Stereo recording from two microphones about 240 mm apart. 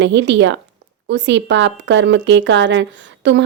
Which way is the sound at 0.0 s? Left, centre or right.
Right.